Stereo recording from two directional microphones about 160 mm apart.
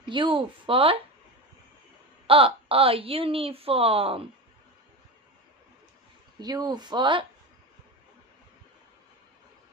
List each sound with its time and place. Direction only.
0.1 s a woman's voice: 30° right (ahead or behind)
2.2 s a woman's voice: 35° right (ahead or behind)
6.4 s speech: 25° right (ahead or behind)